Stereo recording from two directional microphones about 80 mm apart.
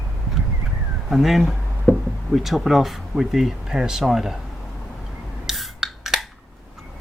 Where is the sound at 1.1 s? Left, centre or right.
Centre.